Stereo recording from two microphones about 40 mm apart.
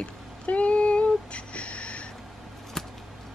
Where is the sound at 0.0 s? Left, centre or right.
Left.